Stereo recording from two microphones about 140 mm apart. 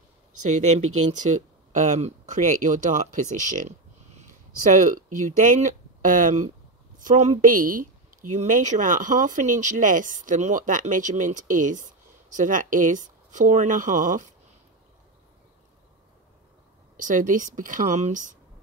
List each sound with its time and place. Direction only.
0.5 s speech: 55° right (ahead or behind)
16.9 s speech: 65° right (ahead or behind)